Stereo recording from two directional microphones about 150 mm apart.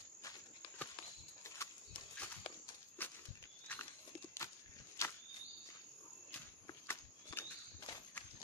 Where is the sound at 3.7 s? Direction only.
10° left (ahead or behind).